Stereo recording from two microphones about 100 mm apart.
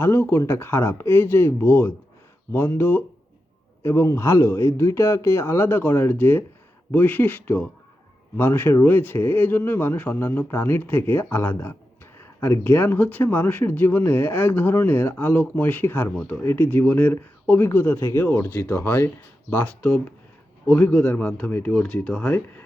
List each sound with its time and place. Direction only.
0.0 s speech: 25° left (ahead or behind)